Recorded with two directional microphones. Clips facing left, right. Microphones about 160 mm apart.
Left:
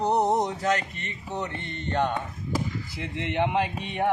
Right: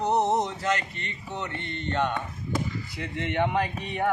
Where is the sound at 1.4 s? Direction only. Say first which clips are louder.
Even; 35° left (ahead or behind).